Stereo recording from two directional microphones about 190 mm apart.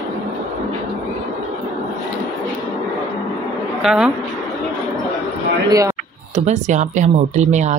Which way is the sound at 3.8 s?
5° right (ahead or behind).